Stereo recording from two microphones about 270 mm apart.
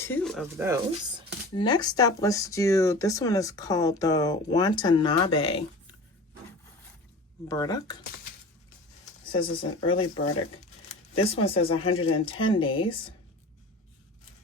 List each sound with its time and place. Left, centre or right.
0.0 s a sound: centre
0.5 s speech: centre
1.5 s speech: centre
7.4 s speech: centre
9.2 s speech: centre